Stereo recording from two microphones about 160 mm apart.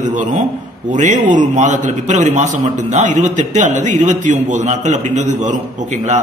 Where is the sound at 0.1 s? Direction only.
50° right (ahead or behind).